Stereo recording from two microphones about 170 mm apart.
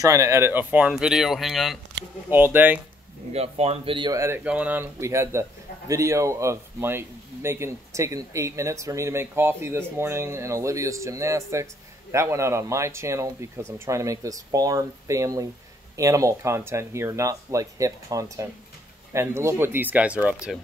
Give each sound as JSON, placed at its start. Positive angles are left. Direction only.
{"t": 0.0, "sound": "speech", "side_deg": -20}
{"t": 2.3, "sound": "a man's voice", "side_deg": -10}
{"t": 3.3, "sound": "speech", "side_deg": -40}
{"t": 4.2, "sound": "a man's voice", "side_deg": -10}